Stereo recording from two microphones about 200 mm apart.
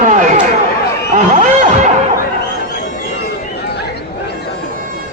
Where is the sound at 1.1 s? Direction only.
35° right (ahead or behind).